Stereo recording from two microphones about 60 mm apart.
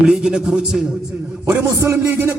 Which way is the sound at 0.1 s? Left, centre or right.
Centre.